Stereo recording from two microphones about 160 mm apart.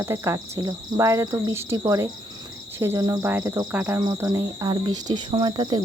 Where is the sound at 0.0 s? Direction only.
15° right (ahead or behind).